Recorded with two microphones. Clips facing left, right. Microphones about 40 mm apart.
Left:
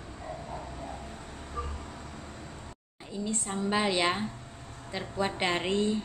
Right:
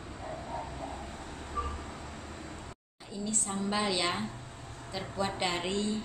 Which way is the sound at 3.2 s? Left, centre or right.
Left.